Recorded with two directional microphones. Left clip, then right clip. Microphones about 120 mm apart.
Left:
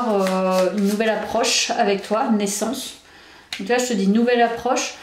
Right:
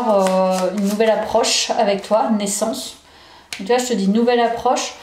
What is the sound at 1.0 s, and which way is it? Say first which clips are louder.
A woman's voice: right 6 dB; 25° right (ahead or behind).